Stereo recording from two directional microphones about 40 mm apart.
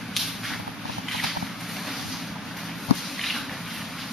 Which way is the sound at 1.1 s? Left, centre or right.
Centre.